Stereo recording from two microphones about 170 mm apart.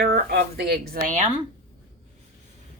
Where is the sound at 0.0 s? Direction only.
65° right (ahead or behind).